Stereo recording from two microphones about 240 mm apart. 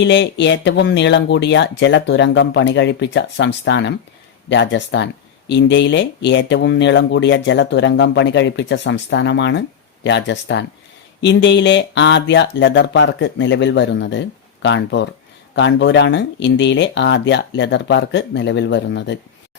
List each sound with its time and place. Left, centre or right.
0.0 s speech: left